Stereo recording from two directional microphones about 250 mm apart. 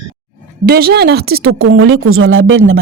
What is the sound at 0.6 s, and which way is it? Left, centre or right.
A woman's voice, right.